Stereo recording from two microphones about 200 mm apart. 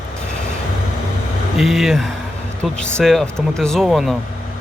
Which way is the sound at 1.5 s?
Centre (ahead or behind).